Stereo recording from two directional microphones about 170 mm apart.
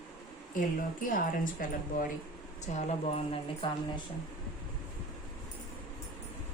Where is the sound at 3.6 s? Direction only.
30° left (ahead or behind).